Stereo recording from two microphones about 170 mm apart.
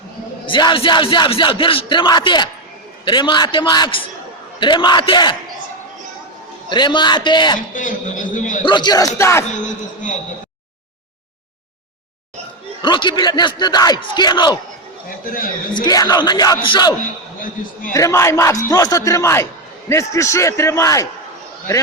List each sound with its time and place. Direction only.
0.4 s speech: 30° left (ahead or behind)
6.7 s speech: 25° left (ahead or behind)
7.7 s a man's voice: 50° left (ahead or behind)
8.6 s speech: 25° left (ahead or behind)
9.6 s a man's voice: 50° left (ahead or behind)
12.8 s speech: 30° left (ahead or behind)
15.7 s speech: 25° left (ahead or behind)
17.9 s a man's voice: 20° left (ahead or behind)